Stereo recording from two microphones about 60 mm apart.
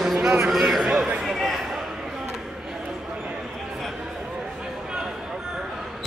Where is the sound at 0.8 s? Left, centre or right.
Right.